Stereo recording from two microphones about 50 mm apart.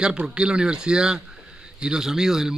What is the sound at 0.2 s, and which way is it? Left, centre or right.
Speech, centre.